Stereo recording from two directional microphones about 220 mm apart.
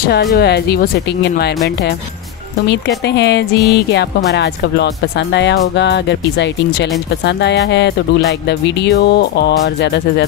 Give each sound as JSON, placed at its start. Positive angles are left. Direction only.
{"t": 0.1, "sound": "speech", "side_deg": 45}
{"t": 3.1, "sound": "speech", "side_deg": 50}